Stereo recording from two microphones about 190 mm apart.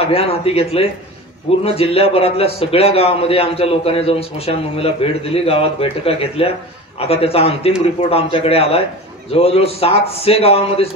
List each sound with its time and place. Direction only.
0.0 s a man's voice: 30° left (ahead or behind)